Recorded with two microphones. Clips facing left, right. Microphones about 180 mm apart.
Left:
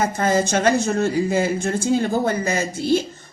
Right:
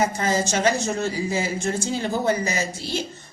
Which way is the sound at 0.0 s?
55° left (ahead or behind).